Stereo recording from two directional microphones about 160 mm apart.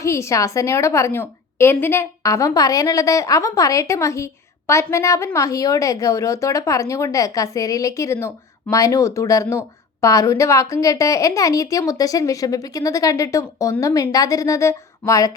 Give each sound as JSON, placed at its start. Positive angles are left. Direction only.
{"t": 0.0, "sound": "a woman's voice", "side_deg": 20}